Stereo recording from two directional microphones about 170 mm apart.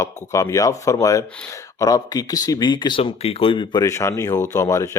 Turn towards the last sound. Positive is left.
turn(degrees=20)  # may be behind; listen again after turning